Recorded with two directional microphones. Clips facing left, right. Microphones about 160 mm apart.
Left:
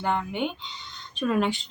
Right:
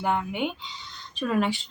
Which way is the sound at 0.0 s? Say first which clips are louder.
Even; 5° right (ahead or behind).